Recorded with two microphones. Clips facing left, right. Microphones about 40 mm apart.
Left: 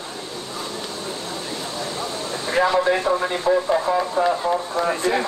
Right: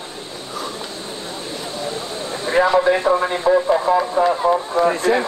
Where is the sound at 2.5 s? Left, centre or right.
Centre.